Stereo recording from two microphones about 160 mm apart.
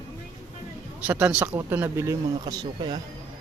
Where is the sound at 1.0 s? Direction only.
10° right (ahead or behind).